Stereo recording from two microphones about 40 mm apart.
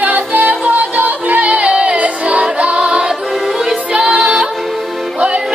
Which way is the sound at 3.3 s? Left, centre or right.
Centre.